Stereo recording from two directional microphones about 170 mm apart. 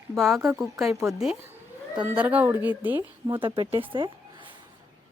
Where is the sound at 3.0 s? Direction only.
30° right (ahead or behind).